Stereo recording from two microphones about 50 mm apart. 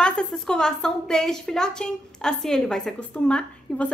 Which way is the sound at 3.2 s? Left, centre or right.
Left.